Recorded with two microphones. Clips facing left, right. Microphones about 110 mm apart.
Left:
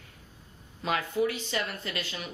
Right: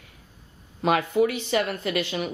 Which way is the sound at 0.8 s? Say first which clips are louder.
Right 7 dB; 65° right (ahead or behind).